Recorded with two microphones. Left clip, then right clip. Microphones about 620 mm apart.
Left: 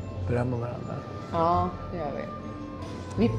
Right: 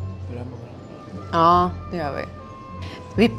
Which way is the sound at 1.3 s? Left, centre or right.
Right.